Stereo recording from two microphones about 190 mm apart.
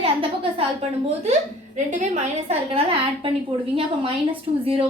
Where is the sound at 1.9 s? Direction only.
40° right (ahead or behind).